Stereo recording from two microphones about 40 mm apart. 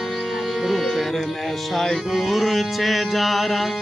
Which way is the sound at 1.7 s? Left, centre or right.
Centre.